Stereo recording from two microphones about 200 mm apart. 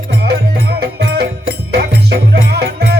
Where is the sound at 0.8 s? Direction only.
55° right (ahead or behind).